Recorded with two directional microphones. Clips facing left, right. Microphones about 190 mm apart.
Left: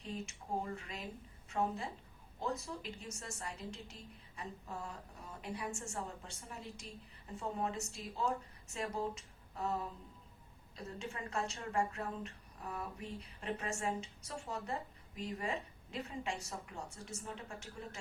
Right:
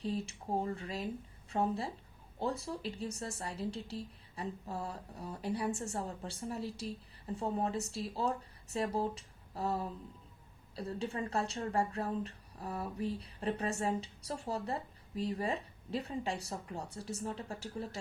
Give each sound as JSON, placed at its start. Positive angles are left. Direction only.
{"t": 0.0, "sound": "speech", "side_deg": -35}